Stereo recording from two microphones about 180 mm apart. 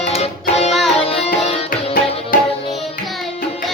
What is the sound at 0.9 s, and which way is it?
Music, 35° left (ahead or behind).